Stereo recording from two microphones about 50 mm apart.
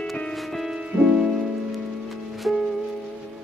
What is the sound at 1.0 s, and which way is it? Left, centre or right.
Music, centre.